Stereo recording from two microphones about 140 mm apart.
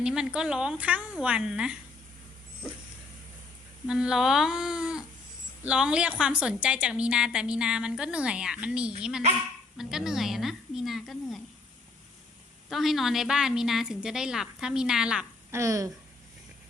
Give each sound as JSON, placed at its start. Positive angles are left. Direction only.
{"t": 0.0, "sound": "a woman's voice", "side_deg": -5}
{"t": 3.8, "sound": "a woman's voice", "side_deg": -5}
{"t": 12.6, "sound": "a woman's voice", "side_deg": 0}
{"t": 15.5, "sound": "speech", "side_deg": -20}